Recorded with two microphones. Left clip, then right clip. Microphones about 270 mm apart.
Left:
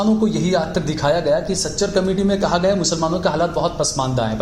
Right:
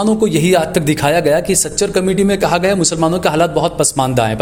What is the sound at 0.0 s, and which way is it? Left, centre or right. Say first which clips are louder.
A man's voice: right 6 dB; right.